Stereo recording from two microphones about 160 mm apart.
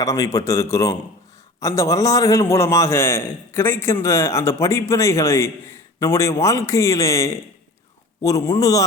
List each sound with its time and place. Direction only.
0.0 s a man's voice: 20° left (ahead or behind)